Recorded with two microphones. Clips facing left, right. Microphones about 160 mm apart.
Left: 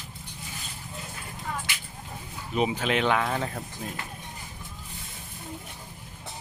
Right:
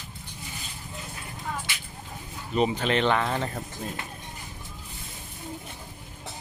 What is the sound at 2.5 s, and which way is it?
Speech, 5° left (ahead or behind).